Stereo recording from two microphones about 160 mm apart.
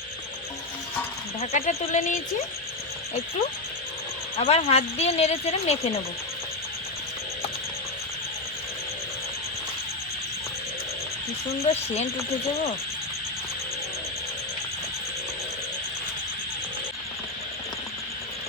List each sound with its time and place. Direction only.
1.4 s speech: 45° left (ahead or behind)
4.4 s speech: 40° left (ahead or behind)
11.6 s speech: 40° left (ahead or behind)